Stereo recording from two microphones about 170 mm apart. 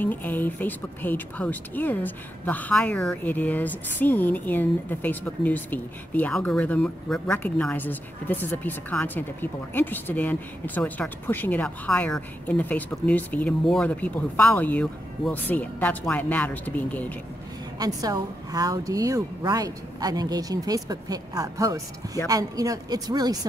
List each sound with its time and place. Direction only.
0.0 s speech: 10° left (ahead or behind)
17.7 s a woman's voice: 20° right (ahead or behind)